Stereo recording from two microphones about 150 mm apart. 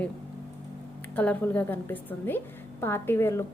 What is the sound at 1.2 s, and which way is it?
A woman's voice, 10° left (ahead or behind).